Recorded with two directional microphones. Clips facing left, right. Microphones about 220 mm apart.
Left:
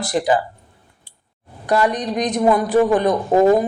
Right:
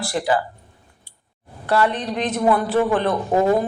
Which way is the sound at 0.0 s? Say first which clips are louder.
Left 3 dB; 20° left (ahead or behind).